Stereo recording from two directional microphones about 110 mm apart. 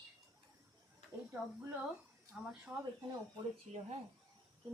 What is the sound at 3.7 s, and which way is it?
Speech, 90° right.